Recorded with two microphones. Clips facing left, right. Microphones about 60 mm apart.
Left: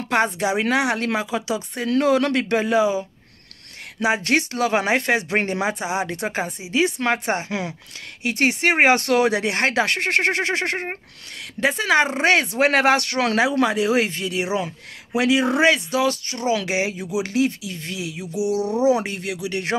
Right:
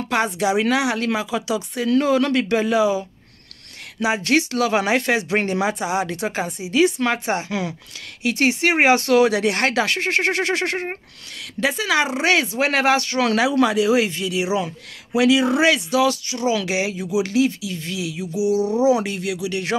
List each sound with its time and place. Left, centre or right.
0.1 s speech: left
9.8 s speech: left
10.3 s a sound: left
11.6 s speech: left
13.3 s speech: left
18.3 s a sound: left
18.9 s speech: left